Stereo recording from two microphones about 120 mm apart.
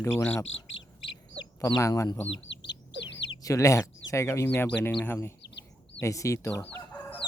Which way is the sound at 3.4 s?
25° left (ahead or behind).